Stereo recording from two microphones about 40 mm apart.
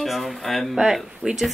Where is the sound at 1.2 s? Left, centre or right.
Left.